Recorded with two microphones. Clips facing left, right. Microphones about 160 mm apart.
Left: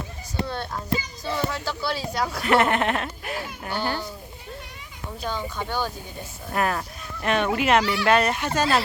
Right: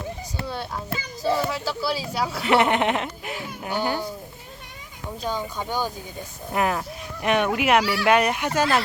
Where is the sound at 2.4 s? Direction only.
15° right (ahead or behind).